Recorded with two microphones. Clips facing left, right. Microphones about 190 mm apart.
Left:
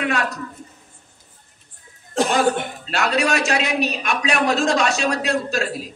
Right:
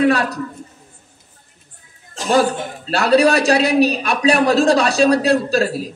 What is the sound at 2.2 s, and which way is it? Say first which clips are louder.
Speech: left 5 dB; 60° left (ahead or behind).